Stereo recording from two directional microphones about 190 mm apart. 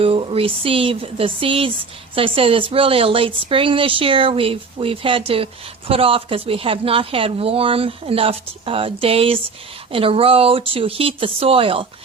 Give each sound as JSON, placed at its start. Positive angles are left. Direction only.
{"t": 0.0, "sound": "speech", "side_deg": -30}